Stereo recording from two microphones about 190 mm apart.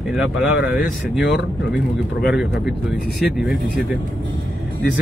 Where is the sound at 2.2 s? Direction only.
5° right (ahead or behind).